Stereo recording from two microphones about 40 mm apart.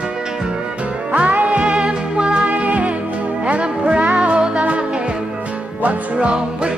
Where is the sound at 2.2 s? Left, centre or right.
Right.